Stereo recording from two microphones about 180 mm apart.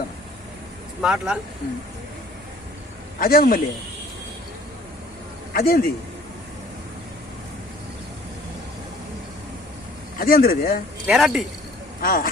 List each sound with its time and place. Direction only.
1.0 s speech: 5° right (ahead or behind)
3.2 s speech: 50° left (ahead or behind)
5.5 s speech: 55° left (ahead or behind)
10.2 s speech: 55° left (ahead or behind)
11.0 s speech: centre (ahead or behind)
12.0 s speech: 50° left (ahead or behind)